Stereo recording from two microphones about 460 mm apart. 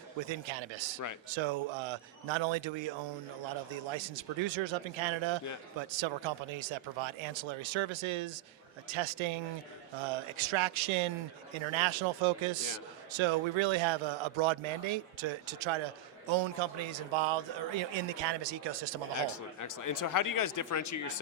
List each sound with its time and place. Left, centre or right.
0.3 s speech: right
3.9 s a man's voice: right
19.1 s speech: left